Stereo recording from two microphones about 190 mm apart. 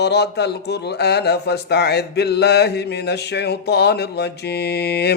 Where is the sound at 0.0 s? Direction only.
60° left (ahead or behind).